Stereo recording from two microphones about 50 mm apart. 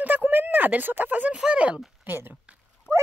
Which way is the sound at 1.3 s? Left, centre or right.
Centre.